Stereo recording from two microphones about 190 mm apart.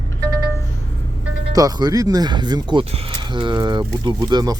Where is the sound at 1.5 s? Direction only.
20° right (ahead or behind).